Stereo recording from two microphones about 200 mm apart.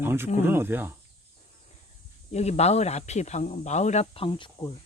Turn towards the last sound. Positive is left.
turn(degrees=25)  # may be behind; listen again after turning